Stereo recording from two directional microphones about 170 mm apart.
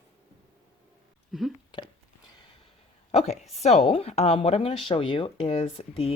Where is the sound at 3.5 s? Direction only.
40° left (ahead or behind).